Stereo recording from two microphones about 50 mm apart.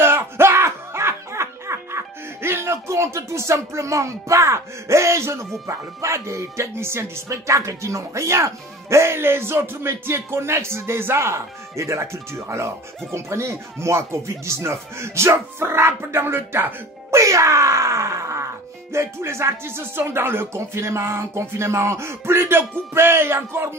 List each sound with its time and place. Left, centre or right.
0.0 s speech: right
17.1 s speech: right
18.9 s speech: right